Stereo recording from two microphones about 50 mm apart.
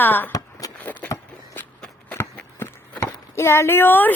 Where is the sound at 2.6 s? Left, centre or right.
Left.